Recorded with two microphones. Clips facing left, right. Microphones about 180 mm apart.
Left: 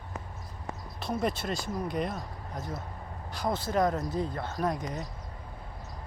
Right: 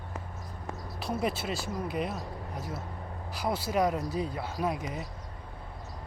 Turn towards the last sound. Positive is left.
turn(degrees=-5)  # may be behind; listen again after turning